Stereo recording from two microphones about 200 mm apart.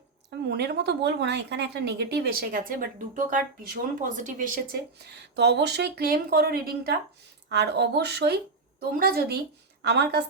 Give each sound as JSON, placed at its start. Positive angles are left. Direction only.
{"t": 0.4, "sound": "speech", "side_deg": -55}